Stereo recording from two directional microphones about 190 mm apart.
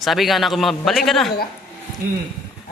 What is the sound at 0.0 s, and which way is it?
A man's voice, centre (ahead or behind).